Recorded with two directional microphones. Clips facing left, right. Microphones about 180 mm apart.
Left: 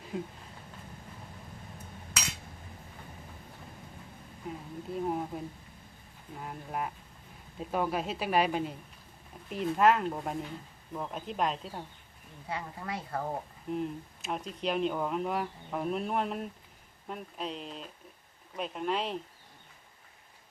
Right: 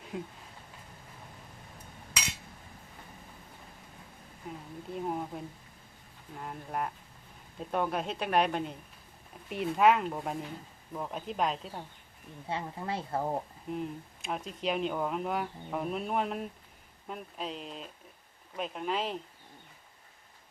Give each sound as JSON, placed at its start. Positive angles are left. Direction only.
{"t": 0.1, "sound": "speech", "side_deg": 0}
{"t": 4.4, "sound": "speech", "side_deg": 0}
{"t": 12.5, "sound": "speech", "side_deg": -25}
{"t": 13.7, "sound": "speech", "side_deg": 0}